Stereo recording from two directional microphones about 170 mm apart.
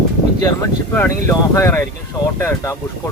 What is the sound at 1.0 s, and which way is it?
Speech, 15° left (ahead or behind).